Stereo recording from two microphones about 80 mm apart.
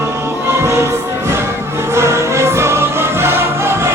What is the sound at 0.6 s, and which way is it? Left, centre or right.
Music, right.